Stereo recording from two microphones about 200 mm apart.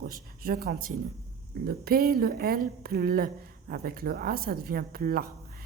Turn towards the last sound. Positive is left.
turn(degrees=-50)  # may be behind; listen again after turning